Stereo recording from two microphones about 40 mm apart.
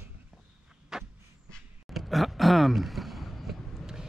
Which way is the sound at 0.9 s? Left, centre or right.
Centre.